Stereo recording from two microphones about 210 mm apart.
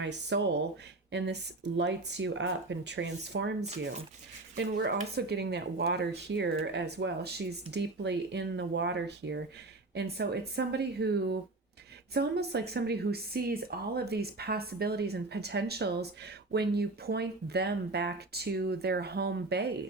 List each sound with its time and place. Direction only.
0.0 s speech: 55° right (ahead or behind)
4.5 s speech: 55° right (ahead or behind)